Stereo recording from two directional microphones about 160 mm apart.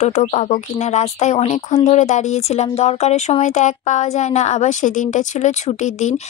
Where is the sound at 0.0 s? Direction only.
45° left (ahead or behind).